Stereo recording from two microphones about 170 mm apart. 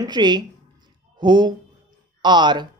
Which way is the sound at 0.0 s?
25° right (ahead or behind).